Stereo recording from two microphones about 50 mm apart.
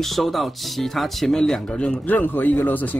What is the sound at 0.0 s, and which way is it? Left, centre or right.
Speech, centre.